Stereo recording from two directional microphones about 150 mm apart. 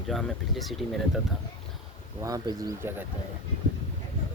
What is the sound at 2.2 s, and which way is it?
Speech, 25° right (ahead or behind).